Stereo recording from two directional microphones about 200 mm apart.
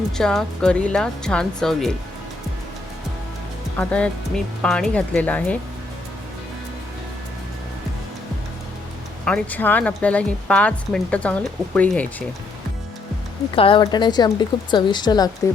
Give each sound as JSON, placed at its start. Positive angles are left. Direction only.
{"t": 0.2, "sound": "speech", "side_deg": 5}
{"t": 3.8, "sound": "speech", "side_deg": 5}
{"t": 9.2, "sound": "speech", "side_deg": 5}
{"t": 13.6, "sound": "a woman's voice", "side_deg": 25}